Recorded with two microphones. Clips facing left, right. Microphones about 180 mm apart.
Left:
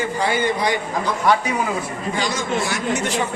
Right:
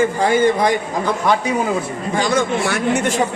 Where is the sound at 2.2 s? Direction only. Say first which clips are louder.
Right 6 dB; 55° right (ahead or behind).